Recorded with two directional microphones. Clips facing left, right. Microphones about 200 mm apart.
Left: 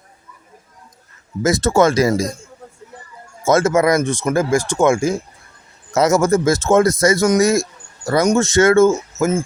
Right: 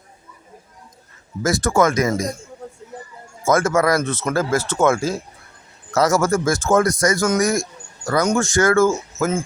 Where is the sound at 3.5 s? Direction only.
25° left (ahead or behind).